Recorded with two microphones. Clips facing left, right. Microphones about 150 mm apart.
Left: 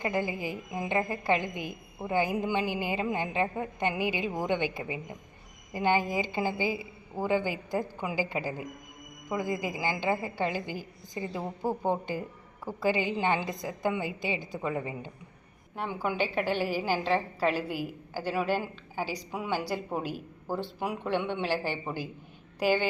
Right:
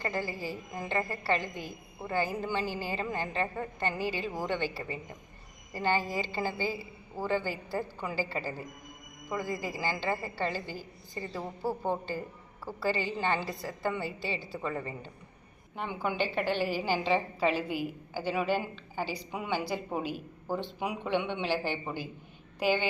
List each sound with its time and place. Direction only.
0.0 s a woman's voice: 15° left (ahead or behind)